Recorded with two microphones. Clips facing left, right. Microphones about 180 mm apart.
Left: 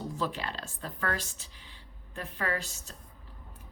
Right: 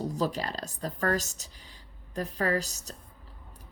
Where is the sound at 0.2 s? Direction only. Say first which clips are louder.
Right 2 dB; 40° right (ahead or behind).